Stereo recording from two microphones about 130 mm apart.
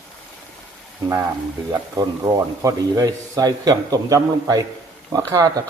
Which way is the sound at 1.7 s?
25° right (ahead or behind).